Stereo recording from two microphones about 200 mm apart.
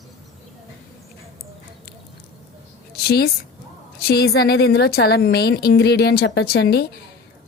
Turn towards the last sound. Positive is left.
turn(degrees=55)  # may be behind; listen again after turning